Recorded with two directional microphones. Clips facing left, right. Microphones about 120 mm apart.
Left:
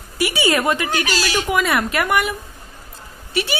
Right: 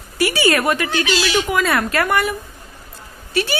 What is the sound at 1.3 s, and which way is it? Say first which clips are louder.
A woman's voice: left 1 dB; 15° left (ahead or behind).